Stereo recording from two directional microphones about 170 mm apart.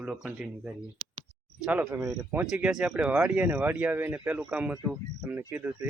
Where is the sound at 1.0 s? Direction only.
35° right (ahead or behind).